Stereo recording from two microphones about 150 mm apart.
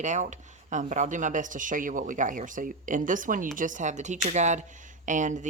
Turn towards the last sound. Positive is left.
turn(degrees=-55)  # may be behind; listen again after turning